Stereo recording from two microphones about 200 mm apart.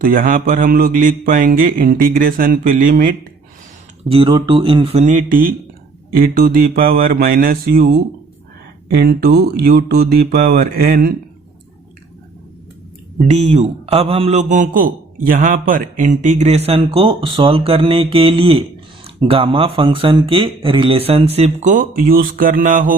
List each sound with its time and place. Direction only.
0.0 s a man's voice: 45° right (ahead or behind)
4.1 s a man's voice: 25° right (ahead or behind); by 11.1 s 50° right (ahead or behind)
13.1 s a man's voice: 35° right (ahead or behind)